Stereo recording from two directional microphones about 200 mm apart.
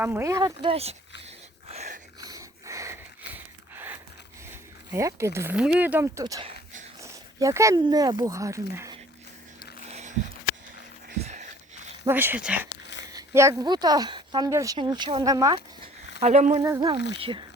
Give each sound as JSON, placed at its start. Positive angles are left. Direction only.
{"t": 0.0, "sound": "speech", "side_deg": -10}
{"t": 1.7, "sound": "a sound", "side_deg": -35}
{"t": 2.2, "sound": "wheeze", "side_deg": -15}
{"t": 4.9, "sound": "speech", "side_deg": -15}
{"t": 9.9, "sound": "biting", "side_deg": -35}
{"t": 11.2, "sound": "a sound", "side_deg": -35}
{"t": 12.0, "sound": "speech", "side_deg": -10}
{"t": 16.2, "sound": "speech", "side_deg": -35}
{"t": 16.6, "sound": "speech", "side_deg": -20}